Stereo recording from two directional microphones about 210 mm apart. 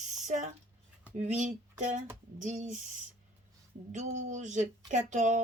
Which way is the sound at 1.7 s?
35° right (ahead or behind).